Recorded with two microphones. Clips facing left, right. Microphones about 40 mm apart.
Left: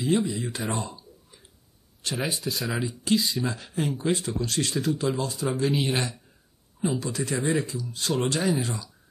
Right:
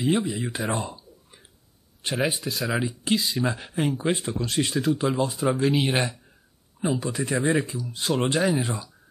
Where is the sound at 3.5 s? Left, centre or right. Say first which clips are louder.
Right 3 dB; right.